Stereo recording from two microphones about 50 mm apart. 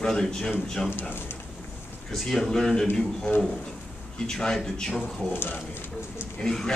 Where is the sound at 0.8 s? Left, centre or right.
Left.